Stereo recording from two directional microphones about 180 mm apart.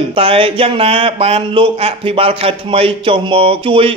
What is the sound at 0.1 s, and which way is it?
Speech, 30° right (ahead or behind).